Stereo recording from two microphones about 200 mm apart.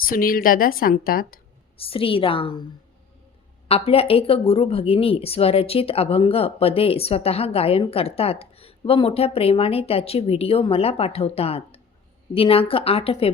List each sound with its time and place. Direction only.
0.0 s a woman's voice: 45° left (ahead or behind)
1.8 s speech: 25° left (ahead or behind)
3.7 s speech: 30° left (ahead or behind)